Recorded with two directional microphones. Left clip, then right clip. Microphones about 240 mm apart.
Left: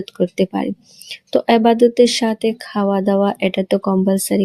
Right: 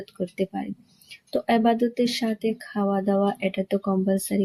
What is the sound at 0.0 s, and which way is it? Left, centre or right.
Speech, left.